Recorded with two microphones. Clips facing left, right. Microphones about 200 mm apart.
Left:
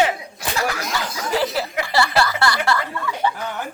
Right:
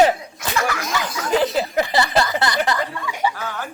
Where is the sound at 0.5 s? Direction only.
35° left (ahead or behind).